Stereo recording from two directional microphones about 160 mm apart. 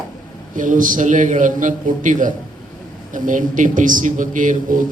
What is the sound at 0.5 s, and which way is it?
A man's voice, 55° right (ahead or behind).